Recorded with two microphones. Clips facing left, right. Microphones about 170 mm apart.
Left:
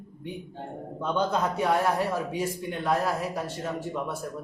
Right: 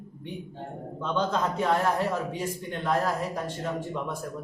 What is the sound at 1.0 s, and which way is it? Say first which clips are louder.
A man's voice: left 1 dB; 10° left (ahead or behind).